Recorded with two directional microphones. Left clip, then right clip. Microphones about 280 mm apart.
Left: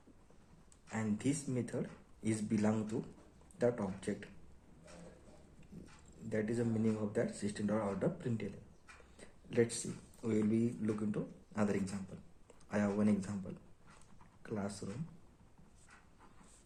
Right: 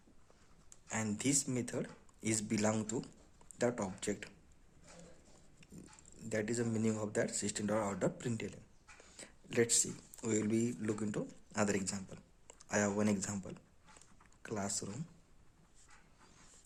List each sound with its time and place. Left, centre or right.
0.9 s a man's voice: right
6.2 s a man's voice: right
9.1 s a sound: right
10.2 s a man's voice: right
14.4 s speech: right